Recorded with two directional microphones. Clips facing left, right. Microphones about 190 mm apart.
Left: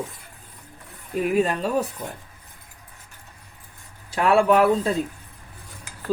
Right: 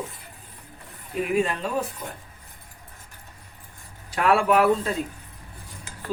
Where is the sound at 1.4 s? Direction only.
40° left (ahead or behind).